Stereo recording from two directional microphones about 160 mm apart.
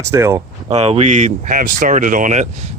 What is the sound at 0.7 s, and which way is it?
Speech, 40° right (ahead or behind).